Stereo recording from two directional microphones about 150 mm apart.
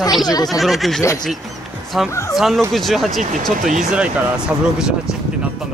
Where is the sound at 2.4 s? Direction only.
Centre (ahead or behind).